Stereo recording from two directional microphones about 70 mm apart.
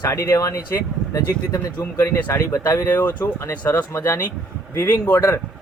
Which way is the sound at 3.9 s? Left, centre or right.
Left.